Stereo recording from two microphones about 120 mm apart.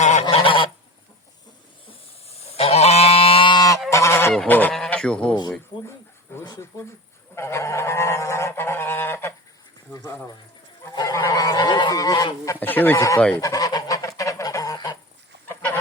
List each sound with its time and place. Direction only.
0.0 s goose: 80° left
0.3 s goose: 45° left (ahead or behind)
1.9 s goose: 60° left (ahead or behind); by 3.8 s 35° left (ahead or behind)
3.8 s goose: 25° left (ahead or behind)
4.9 s speech: 10° left (ahead or behind)
5.3 s speech: 35° left (ahead or behind)
7.3 s goose: 20° left (ahead or behind)
9.9 s speech: 25° left (ahead or behind)
10.9 s honk: 30° left (ahead or behind)
12.5 s speech: 15° left (ahead or behind)
13.4 s goose: 30° left (ahead or behind)